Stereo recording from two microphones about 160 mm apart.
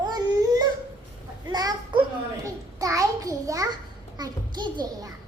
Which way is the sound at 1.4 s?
25° right (ahead or behind).